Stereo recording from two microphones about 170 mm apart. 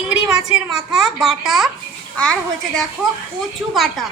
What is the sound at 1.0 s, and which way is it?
Speech, centre (ahead or behind).